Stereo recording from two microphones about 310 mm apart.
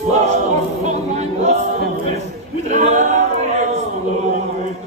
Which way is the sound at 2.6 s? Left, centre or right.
Right.